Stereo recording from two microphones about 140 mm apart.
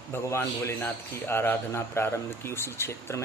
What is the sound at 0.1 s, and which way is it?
A man's voice, 15° left (ahead or behind).